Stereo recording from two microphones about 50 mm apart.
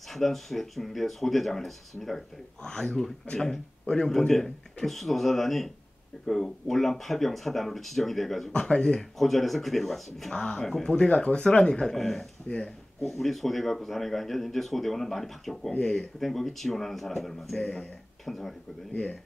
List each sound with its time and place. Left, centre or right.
0.1 s speech: centre
3.8 s speech: centre
8.5 s speech: centre
9.2 s speech: centre
10.3 s speech: centre
11.9 s speech: centre
12.4 s speech: centre
13.0 s speech: centre
15.7 s speech: left
16.0 s speech: centre
17.6 s speech: centre
18.2 s speech: centre